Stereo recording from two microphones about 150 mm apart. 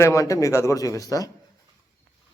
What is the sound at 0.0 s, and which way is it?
Speech, 20° left (ahead or behind).